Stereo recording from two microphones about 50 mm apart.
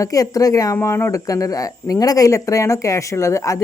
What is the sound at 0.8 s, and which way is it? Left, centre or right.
Speech, left.